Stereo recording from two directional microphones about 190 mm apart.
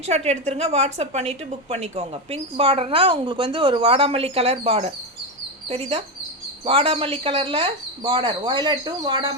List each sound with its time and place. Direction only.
0.1 s a woman's voice: 35° right (ahead or behind)